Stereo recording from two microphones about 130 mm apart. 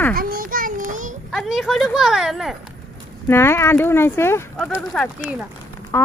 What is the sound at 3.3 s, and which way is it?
A child's voice, 20° left (ahead or behind).